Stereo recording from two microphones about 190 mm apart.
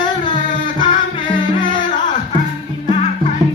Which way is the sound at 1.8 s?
40° left (ahead or behind).